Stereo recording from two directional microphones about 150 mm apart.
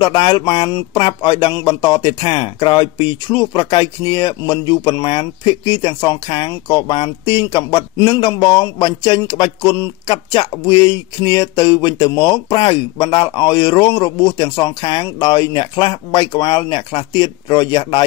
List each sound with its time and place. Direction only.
0.0 s speech: 35° left (ahead or behind)